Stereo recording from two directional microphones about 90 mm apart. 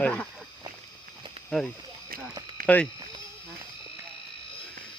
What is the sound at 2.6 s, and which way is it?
Speech, 15° left (ahead or behind).